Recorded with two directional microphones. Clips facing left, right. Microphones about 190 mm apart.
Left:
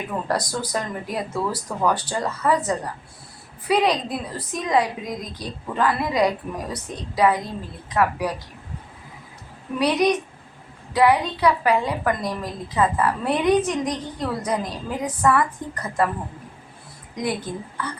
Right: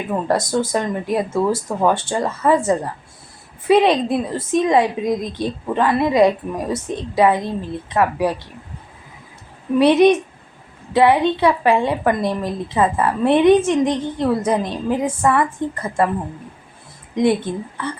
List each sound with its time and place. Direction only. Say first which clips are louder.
0.3 s a woman's voice: right 8 dB; 25° right (ahead or behind)
9.7 s a woman's voice: right 8 dB; 25° right (ahead or behind)
17.2 s a woman's voice: right 9 dB; 25° right (ahead or behind)